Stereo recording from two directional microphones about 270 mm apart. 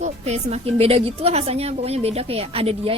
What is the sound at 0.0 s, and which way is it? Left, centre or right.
A woman's voice, right.